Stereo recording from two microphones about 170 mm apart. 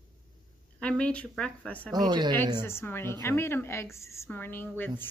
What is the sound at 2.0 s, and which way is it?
Speech, 25° right (ahead or behind).